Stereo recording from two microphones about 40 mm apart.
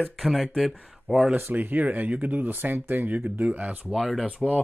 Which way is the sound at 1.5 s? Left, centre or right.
Right.